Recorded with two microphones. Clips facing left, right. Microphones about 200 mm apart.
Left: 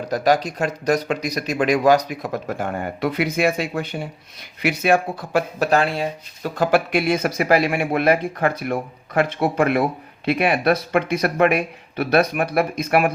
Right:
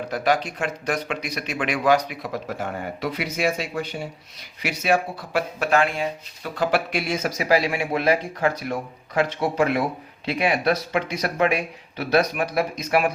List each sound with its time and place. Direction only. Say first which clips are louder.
0.1 s speech: left 5 dB; 40° left (ahead or behind); by 13.1 s 55° left (ahead or behind)